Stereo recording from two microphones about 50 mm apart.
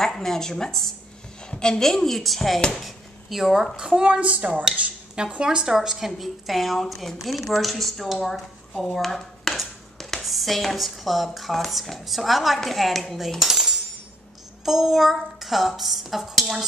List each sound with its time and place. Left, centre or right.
0.0 s a woman's voice: centre
3.7 s a woman's voice: centre
5.1 s a woman's voice: centre